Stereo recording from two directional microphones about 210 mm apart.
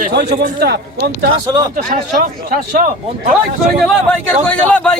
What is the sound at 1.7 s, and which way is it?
Speech, 40° right (ahead or behind).